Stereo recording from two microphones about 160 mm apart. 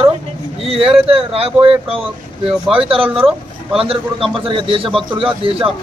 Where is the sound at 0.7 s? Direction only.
35° right (ahead or behind).